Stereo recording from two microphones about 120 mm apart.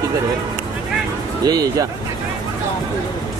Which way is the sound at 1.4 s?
35° right (ahead or behind).